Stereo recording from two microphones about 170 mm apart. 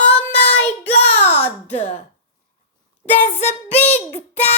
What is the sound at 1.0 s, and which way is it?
Speech, 10° left (ahead or behind).